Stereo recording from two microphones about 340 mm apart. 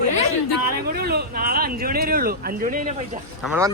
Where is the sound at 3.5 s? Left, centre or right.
Centre.